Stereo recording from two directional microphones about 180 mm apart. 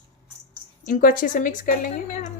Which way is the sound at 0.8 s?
50° left (ahead or behind).